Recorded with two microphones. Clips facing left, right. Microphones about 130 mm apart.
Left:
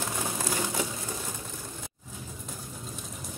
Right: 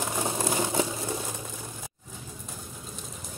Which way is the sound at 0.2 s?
25° right (ahead or behind).